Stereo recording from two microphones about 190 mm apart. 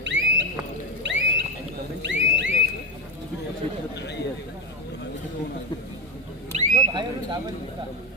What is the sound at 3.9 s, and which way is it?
Chatter, 65° left (ahead or behind).